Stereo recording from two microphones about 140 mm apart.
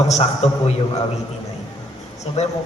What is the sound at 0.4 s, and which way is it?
Speech, 50° left (ahead or behind).